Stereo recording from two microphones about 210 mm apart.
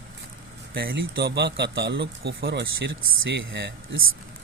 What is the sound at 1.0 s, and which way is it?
Speech, 60° right (ahead or behind).